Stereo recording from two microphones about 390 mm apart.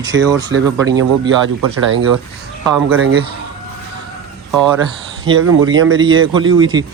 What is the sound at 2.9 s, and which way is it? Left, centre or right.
Speech, right.